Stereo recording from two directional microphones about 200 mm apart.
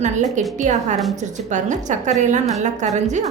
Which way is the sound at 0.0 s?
35° right (ahead or behind).